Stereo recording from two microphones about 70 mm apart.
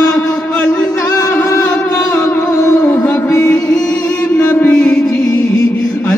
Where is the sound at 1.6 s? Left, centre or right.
Centre.